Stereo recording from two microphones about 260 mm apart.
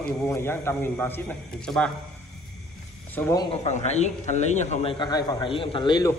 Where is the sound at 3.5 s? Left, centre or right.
Left.